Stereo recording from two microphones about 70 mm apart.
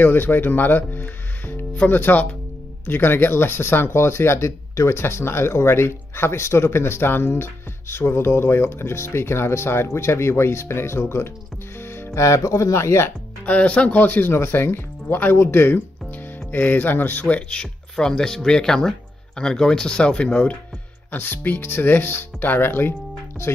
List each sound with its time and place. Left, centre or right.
0.0 s speech: left
13.5 s speech: centre